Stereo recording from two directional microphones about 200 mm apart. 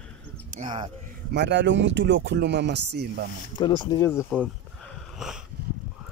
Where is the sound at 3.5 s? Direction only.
20° left (ahead or behind).